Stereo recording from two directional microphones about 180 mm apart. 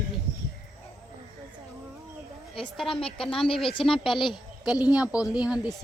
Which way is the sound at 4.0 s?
Centre (ahead or behind).